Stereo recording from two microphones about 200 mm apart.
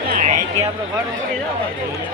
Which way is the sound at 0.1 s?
40° right (ahead or behind).